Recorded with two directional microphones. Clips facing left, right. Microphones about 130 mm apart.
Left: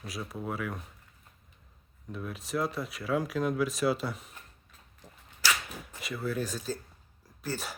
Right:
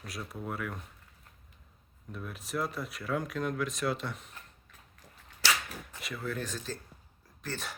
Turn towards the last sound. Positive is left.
turn(degrees=5)  # may be behind; listen again after turning